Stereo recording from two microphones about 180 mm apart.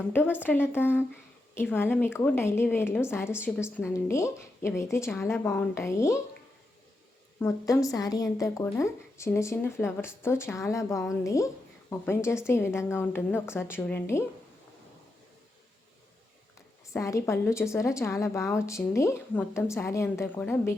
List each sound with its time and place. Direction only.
0.1 s a woman's voice: 10° left (ahead or behind)
7.3 s a woman's voice: 15° left (ahead or behind)
16.9 s a woman's voice: 15° left (ahead or behind)